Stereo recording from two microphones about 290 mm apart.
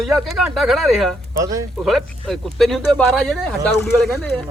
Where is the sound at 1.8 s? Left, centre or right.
Centre.